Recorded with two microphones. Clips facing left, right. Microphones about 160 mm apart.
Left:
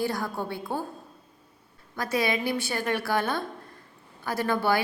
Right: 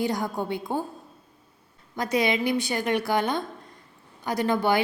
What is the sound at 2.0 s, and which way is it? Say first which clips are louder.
A woman's voice: right 3 dB; 20° right (ahead or behind).